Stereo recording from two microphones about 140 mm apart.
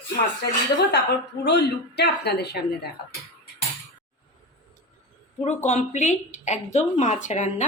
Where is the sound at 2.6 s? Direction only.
90° left.